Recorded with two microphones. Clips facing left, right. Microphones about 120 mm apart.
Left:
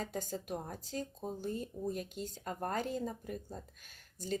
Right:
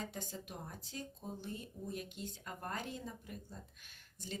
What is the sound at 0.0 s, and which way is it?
Speech, 40° left (ahead or behind).